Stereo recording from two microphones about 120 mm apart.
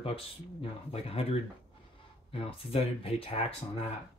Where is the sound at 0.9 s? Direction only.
60° left (ahead or behind).